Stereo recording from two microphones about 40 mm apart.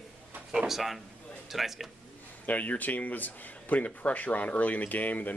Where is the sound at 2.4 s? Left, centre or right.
Left.